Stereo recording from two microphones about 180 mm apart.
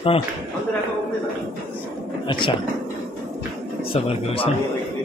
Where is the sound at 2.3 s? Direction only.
25° left (ahead or behind).